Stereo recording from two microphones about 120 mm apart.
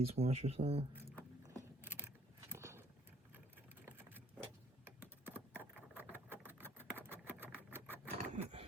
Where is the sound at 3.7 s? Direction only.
15° right (ahead or behind).